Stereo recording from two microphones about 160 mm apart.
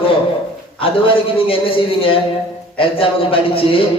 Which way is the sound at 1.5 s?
35° left (ahead or behind).